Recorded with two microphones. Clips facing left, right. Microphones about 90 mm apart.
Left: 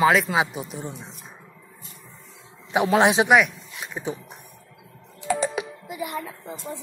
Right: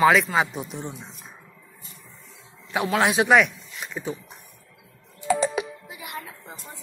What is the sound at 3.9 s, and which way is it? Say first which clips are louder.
Speech: left 1 dB; 20° left (ahead or behind).